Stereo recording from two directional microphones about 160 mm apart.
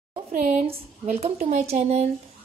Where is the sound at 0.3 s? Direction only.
55° right (ahead or behind).